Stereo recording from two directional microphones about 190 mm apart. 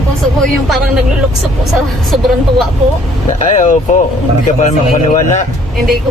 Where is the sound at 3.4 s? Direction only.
40° left (ahead or behind).